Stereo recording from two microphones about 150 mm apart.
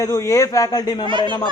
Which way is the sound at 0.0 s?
20° left (ahead or behind).